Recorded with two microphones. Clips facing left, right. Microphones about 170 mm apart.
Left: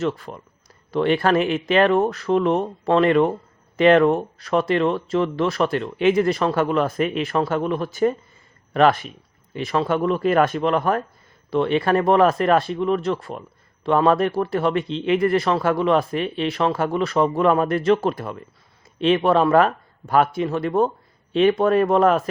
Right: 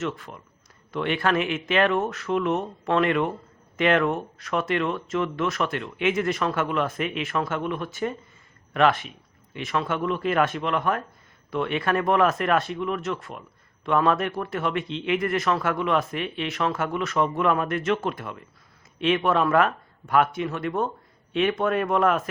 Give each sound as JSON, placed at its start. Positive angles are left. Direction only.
{"t": 0.0, "sound": "a man's voice", "side_deg": 35}